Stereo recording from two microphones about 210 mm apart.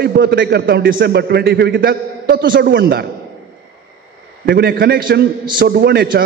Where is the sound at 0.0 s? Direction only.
50° right (ahead or behind).